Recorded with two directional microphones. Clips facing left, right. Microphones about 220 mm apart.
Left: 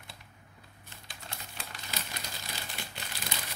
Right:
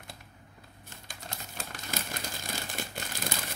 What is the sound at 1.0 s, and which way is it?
Crumpling, 45° right (ahead or behind).